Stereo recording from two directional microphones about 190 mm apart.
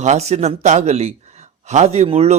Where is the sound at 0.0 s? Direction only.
35° right (ahead or behind).